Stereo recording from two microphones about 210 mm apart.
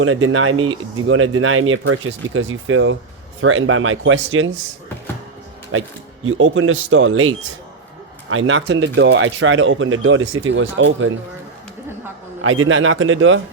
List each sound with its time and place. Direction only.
0.0 s speech: 75° right (ahead or behind)
5.7 s speech: 75° right (ahead or behind)
12.4 s speech: 70° right (ahead or behind)